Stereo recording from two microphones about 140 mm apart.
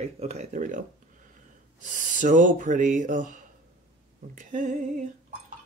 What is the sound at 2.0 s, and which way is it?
Speech, 70° right (ahead or behind).